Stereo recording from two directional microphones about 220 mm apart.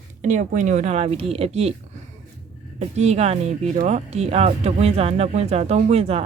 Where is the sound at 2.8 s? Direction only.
30° right (ahead or behind).